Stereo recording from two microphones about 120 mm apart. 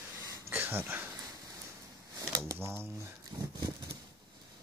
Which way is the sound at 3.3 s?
35° right (ahead or behind).